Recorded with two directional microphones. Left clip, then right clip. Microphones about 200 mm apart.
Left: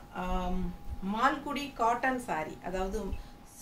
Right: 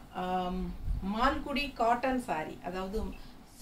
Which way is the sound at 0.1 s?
15° left (ahead or behind).